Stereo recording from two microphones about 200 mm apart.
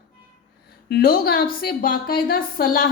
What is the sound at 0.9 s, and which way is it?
A woman's voice, 50° left (ahead or behind).